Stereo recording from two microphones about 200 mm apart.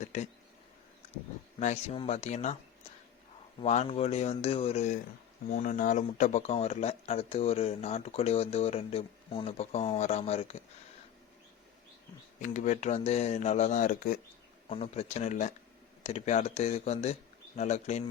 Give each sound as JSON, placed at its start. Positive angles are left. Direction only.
{"t": 0.0, "sound": "a sound", "side_deg": 35}
{"t": 1.5, "sound": "speech", "side_deg": 35}
{"t": 3.6, "sound": "speech", "side_deg": 35}
{"t": 12.4, "sound": "speech", "side_deg": 35}
{"t": 14.7, "sound": "speech", "side_deg": 30}